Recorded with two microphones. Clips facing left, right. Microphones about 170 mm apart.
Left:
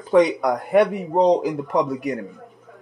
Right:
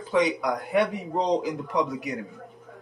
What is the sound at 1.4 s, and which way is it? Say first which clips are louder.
Speech: left 5 dB; 50° left (ahead or behind).